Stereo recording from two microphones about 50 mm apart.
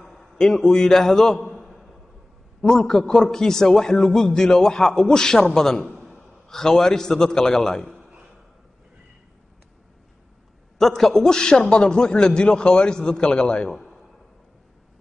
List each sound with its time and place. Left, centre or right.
0.4 s a man's voice: centre
5.9 s gasp: centre
6.5 s a man's voice: centre
7.9 s a sound: centre
10.8 s a man's voice: centre
13.7 s a sound: centre